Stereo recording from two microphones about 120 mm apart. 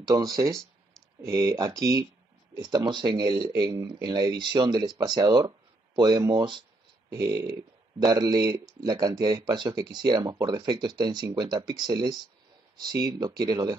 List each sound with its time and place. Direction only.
0.0 s speech: 30° right (ahead or behind)
7.1 s speech: 30° right (ahead or behind)